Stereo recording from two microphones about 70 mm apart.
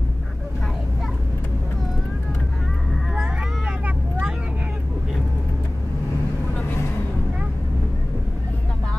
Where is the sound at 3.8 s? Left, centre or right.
Right.